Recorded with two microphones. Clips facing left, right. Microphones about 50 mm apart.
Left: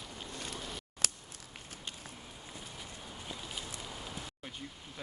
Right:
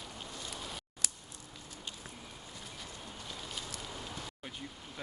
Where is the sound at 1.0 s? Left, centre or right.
Left.